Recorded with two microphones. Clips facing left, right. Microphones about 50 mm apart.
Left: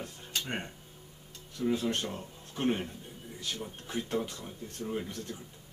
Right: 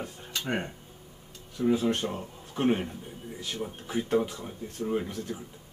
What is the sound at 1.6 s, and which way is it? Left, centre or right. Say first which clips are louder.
Speech: right 5 dB; centre.